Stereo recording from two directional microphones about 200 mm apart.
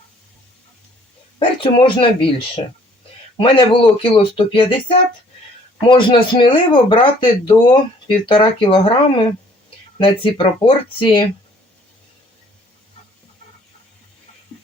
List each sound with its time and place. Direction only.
1.6 s speech: 25° left (ahead or behind)
3.3 s speech: 25° left (ahead or behind)